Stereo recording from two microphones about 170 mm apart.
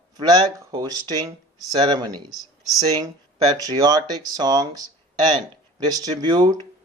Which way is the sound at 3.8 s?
20° right (ahead or behind).